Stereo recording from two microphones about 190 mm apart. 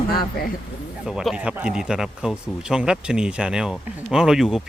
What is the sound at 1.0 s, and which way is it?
Speech, 5° right (ahead or behind).